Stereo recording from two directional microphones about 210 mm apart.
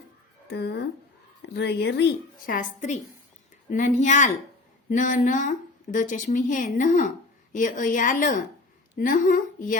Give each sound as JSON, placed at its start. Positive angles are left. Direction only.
{"t": 0.4, "sound": "a woman's voice", "side_deg": 50}